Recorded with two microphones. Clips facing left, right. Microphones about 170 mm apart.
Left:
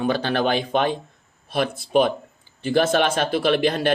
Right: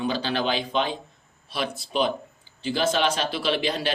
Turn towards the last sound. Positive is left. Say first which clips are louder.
# left 6 dB
turn(degrees=55)  # may be behind; listen again after turning